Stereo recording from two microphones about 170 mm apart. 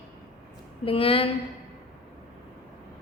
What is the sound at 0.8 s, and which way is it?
Speech, 35° left (ahead or behind).